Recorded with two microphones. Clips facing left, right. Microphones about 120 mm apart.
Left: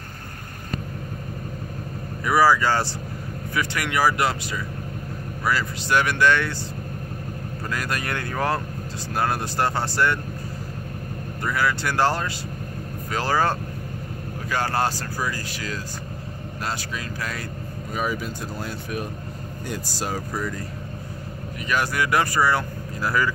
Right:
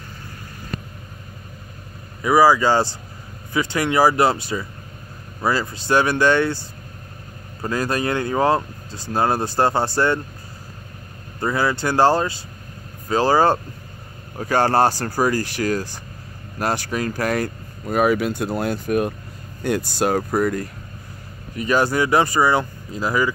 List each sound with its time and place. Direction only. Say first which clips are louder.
2.2 s speech: right 4 dB; 20° right (ahead or behind)
7.6 s speech: right 7 dB; 30° right (ahead or behind)
11.4 s speech: right 4 dB; 30° right (ahead or behind)
15.0 s speech: right 8 dB; 45° right (ahead or behind)
15.3 s speech: right 10 dB; 60° right (ahead or behind)
21.5 s speech: right 6 dB; 30° right (ahead or behind)